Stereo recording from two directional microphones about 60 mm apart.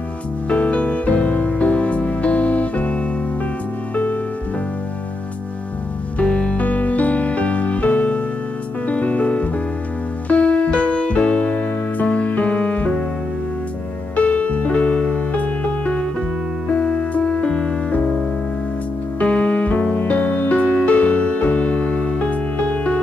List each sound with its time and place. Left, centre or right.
0.5 s music: left
6.1 s music: centre
14.1 s music: left
19.1 s music: left